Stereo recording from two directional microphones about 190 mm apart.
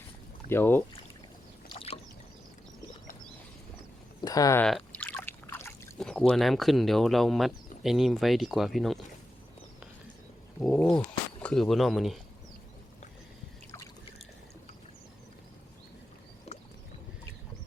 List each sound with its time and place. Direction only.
0.5 s speech: 10° left (ahead or behind)
1.7 s boat: 30° left (ahead or behind)
4.2 s a sound: 20° left (ahead or behind)
4.9 s boat: 10° left (ahead or behind)
6.0 s speech: 5° left (ahead or behind)
10.6 s speech: 5° left (ahead or behind)